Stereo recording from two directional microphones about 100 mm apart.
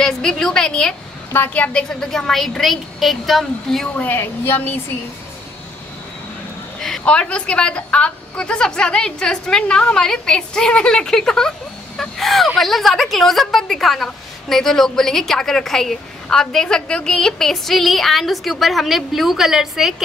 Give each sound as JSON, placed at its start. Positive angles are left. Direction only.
{"t": 0.0, "sound": "a woman's voice", "side_deg": 5}
{"t": 1.3, "sound": "a woman's voice", "side_deg": 15}
{"t": 3.9, "sound": "a woman's voice", "side_deg": 20}
{"t": 6.8, "sound": "a woman's voice", "side_deg": 5}